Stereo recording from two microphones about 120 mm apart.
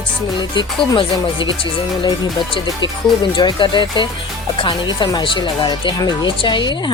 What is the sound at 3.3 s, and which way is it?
A woman's voice, 40° left (ahead or behind).